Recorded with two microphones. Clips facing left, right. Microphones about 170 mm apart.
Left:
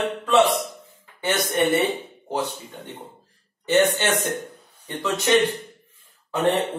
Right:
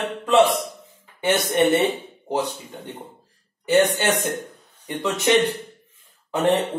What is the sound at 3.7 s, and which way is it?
A man's voice, 10° right (ahead or behind).